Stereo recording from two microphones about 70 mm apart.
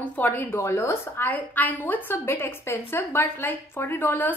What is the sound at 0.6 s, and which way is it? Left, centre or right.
Speech, left.